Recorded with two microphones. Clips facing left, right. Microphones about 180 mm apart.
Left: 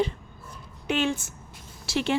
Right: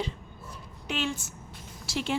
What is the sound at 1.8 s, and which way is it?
Speech, 70° left (ahead or behind).